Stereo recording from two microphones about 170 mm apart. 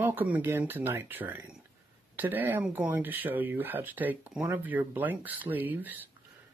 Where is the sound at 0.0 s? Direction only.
10° right (ahead or behind).